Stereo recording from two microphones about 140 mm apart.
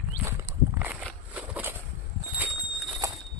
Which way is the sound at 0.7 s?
10° right (ahead or behind).